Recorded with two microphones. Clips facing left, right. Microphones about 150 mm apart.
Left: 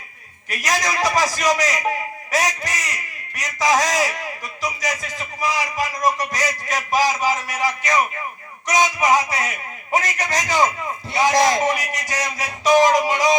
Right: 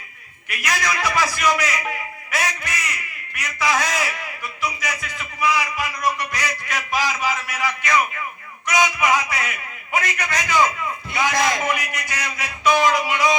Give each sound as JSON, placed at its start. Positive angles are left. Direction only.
{"t": 0.4, "sound": "a man's voice", "side_deg": 40}